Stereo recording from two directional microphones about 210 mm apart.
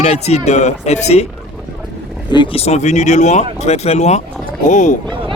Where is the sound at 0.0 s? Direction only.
30° left (ahead or behind).